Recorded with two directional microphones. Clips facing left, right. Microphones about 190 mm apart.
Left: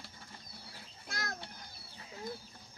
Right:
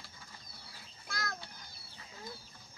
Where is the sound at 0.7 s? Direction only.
40° left (ahead or behind).